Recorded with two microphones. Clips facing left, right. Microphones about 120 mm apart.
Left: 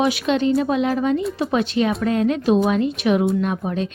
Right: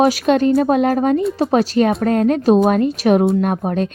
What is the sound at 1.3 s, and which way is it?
Speech, 40° right (ahead or behind).